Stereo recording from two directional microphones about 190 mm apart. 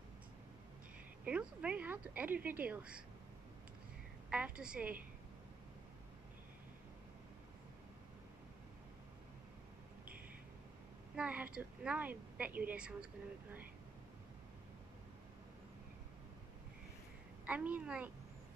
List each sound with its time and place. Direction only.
1.2 s a woman's voice: 5° right (ahead or behind)
4.3 s a woman's voice: 5° right (ahead or behind)
11.1 s a woman's voice: 10° right (ahead or behind)
17.5 s a woman's voice: 10° right (ahead or behind)